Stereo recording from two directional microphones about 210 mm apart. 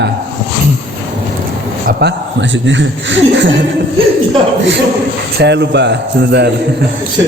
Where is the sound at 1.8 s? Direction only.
55° right (ahead or behind).